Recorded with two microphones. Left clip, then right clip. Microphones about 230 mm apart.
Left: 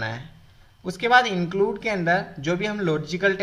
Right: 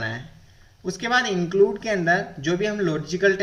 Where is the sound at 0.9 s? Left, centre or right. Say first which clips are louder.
Left 4 dB; centre.